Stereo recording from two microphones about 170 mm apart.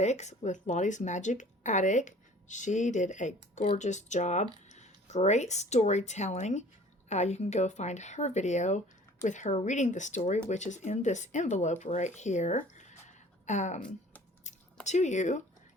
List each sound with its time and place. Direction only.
0.0 s speech: 40° left (ahead or behind)